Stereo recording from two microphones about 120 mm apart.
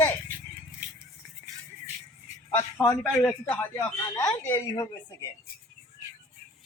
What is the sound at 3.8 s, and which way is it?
Speech, 30° left (ahead or behind).